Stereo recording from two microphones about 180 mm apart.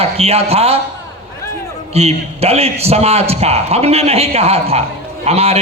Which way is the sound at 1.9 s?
35° right (ahead or behind).